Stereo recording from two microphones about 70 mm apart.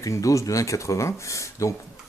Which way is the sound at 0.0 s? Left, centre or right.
Left.